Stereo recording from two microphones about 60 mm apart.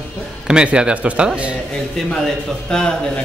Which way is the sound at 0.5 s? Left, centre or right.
Centre.